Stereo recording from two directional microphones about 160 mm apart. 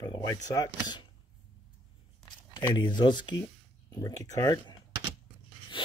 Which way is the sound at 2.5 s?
30° left (ahead or behind).